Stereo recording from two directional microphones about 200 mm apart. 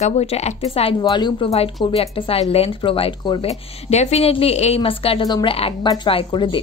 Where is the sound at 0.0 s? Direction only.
30° left (ahead or behind).